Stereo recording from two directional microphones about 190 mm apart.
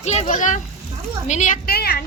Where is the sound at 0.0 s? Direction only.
35° left (ahead or behind).